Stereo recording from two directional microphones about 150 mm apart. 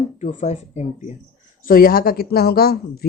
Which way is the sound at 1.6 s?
75° left (ahead or behind).